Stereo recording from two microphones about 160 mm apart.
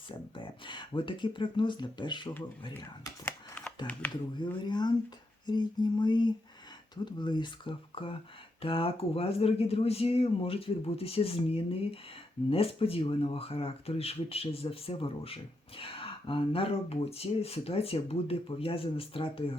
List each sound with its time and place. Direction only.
0.3 s speech: 30° left (ahead or behind)
3.2 s shuffling cards: 10° left (ahead or behind)
4.6 s speech: 25° left (ahead or behind)